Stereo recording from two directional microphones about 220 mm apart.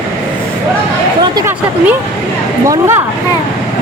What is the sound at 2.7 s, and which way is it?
Speech, 10° right (ahead or behind).